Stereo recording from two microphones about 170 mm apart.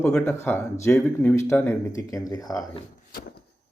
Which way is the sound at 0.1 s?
10° left (ahead or behind).